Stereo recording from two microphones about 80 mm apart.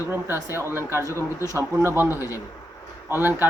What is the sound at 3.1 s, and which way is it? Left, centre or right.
Speech, right.